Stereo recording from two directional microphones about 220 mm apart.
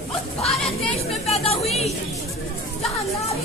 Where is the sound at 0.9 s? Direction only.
30° left (ahead or behind).